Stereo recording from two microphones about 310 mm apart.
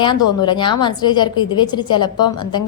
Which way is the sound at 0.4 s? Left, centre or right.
Centre.